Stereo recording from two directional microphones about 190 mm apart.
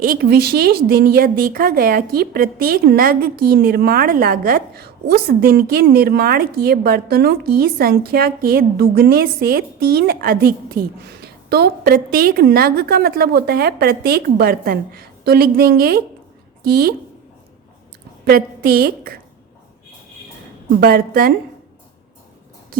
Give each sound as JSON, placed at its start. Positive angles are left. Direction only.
{"t": 0.0, "sound": "a woman's voice", "side_deg": -50}
{"t": 18.3, "sound": "a woman's voice", "side_deg": -50}
{"t": 20.8, "sound": "a woman's voice", "side_deg": -50}